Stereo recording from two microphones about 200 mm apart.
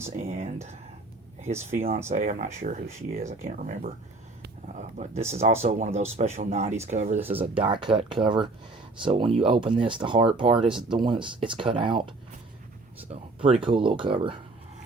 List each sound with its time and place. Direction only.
0.0 s speech: 35° right (ahead or behind)